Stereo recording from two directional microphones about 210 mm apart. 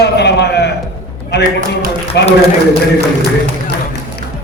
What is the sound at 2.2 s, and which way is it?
Speech, 55° left (ahead or behind).